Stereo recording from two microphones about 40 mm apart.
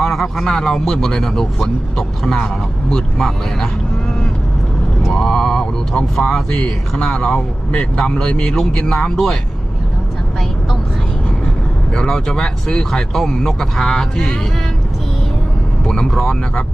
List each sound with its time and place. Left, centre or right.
0.0 s speech: centre
5.1 s speech: centre
11.9 s speech: centre
15.8 s speech: centre